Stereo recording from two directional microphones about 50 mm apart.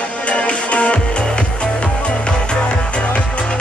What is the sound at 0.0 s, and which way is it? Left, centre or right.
Music, left.